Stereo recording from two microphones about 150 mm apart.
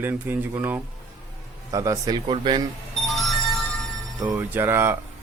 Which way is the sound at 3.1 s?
Centre (ahead or behind).